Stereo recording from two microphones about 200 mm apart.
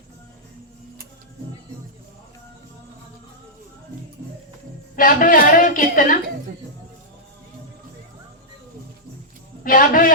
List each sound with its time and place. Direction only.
4.9 s a woman's voice: 45° left (ahead or behind)
9.6 s a woman's voice: 45° left (ahead or behind)